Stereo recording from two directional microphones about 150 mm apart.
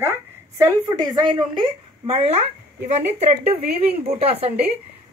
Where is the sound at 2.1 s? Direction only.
45° right (ahead or behind).